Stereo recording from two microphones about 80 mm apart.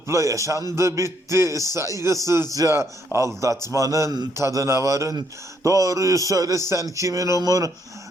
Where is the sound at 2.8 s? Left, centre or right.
Right.